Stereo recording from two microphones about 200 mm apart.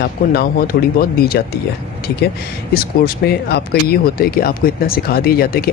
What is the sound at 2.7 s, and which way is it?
Speech, 50° left (ahead or behind).